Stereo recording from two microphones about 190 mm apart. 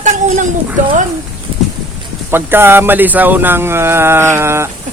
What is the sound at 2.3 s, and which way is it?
Speech, 10° right (ahead or behind).